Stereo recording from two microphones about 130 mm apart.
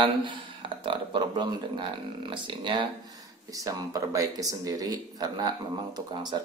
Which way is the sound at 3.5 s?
25° right (ahead or behind).